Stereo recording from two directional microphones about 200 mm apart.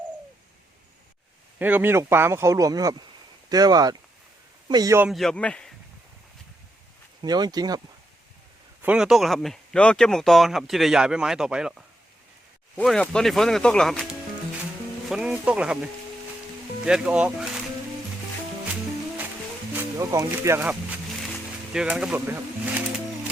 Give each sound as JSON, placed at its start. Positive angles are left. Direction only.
{"t": 1.5, "sound": "speech", "side_deg": -10}
{"t": 5.0, "sound": "speech", "side_deg": 0}
{"t": 7.2, "sound": "speech", "side_deg": -20}
{"t": 8.8, "sound": "speech", "side_deg": -5}
{"t": 12.7, "sound": "speech", "side_deg": 5}
{"t": 19.7, "sound": "speech", "side_deg": -15}